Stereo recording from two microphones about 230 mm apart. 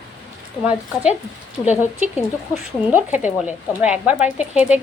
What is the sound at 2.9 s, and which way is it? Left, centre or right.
A woman's voice, centre.